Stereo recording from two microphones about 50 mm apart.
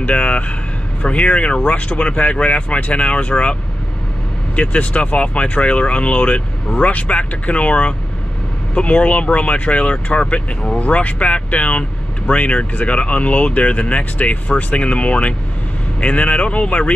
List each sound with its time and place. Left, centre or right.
0.0 s speech: left
4.6 s speech: left
10.3 s speech: centre
10.8 s speech: left